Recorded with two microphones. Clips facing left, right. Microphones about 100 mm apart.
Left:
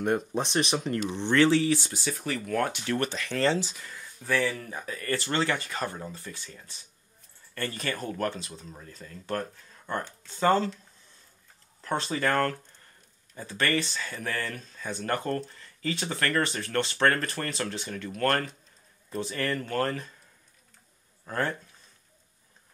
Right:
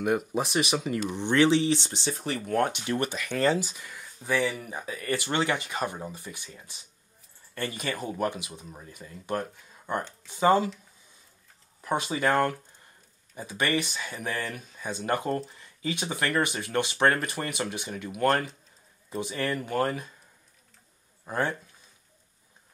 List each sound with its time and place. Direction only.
0.0 s speech: 10° right (ahead or behind)
11.8 s speech: 15° right (ahead or behind)
21.3 s speech: 20° right (ahead or behind)